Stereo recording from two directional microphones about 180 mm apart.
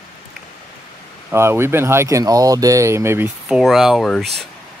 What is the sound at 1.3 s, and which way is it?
Speech, 15° right (ahead or behind).